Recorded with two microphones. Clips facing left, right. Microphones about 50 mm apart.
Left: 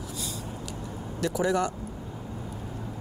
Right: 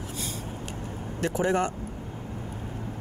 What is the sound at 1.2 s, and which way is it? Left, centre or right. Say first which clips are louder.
Speech: right 1 dB; right.